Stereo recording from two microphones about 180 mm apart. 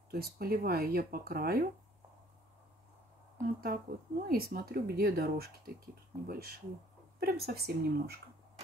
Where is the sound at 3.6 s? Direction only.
55° right (ahead or behind).